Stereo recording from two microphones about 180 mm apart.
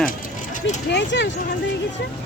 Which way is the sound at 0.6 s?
75° left (ahead or behind).